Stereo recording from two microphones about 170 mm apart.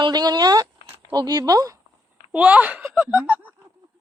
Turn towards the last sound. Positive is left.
turn(degrees=-10)  # may be behind; listen again after turning